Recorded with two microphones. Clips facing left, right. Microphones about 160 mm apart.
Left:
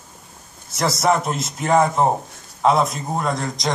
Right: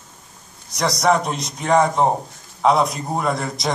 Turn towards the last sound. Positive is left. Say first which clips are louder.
# right 1 dB
turn(degrees=0)  # may be behind; listen again after turning